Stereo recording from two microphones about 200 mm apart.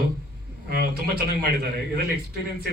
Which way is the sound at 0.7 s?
50° right (ahead or behind).